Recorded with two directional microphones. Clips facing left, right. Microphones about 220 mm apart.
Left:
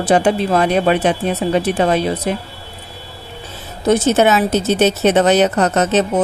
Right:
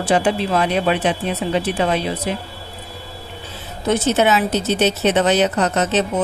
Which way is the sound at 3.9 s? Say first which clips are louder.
Left 4 dB; 45° left (ahead or behind).